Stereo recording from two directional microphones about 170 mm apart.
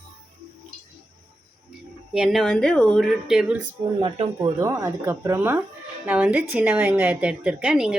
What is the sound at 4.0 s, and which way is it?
A woman's voice, 30° right (ahead or behind).